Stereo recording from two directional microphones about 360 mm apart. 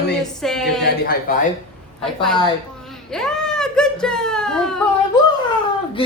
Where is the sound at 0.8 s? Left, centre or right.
Left.